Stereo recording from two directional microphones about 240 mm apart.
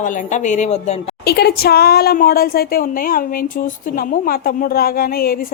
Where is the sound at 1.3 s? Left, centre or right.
Left.